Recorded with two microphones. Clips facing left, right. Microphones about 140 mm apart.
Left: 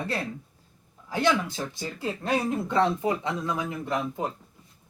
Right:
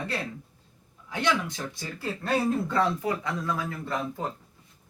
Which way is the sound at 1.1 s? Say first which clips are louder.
Left 3 dB; 30° left (ahead or behind).